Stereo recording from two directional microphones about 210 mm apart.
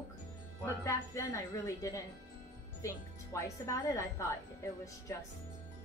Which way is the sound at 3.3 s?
15° left (ahead or behind).